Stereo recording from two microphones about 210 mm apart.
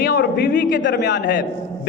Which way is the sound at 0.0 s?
50° left (ahead or behind).